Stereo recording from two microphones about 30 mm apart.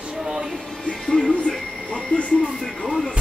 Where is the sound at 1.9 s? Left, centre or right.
Left.